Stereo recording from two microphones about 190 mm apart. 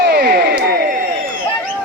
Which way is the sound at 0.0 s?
60° right (ahead or behind).